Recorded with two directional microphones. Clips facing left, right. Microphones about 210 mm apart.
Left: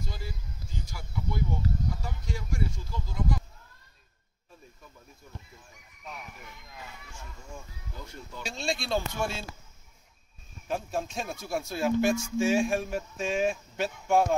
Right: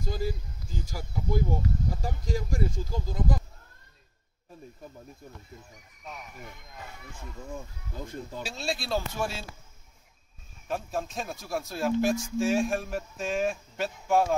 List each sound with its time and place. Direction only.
0.0 s speech: 40° right (ahead or behind)
8.0 s speech: 50° right (ahead or behind)
8.5 s speech: 5° right (ahead or behind)
10.7 s speech: centre (ahead or behind)